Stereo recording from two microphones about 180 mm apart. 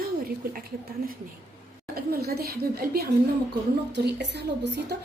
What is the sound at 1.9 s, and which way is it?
A woman's voice, 60° right (ahead or behind).